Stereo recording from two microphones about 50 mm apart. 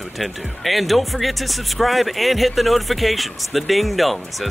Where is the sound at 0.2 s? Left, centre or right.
Centre.